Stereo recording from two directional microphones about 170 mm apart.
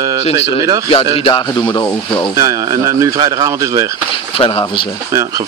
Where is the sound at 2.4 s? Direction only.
20° right (ahead or behind).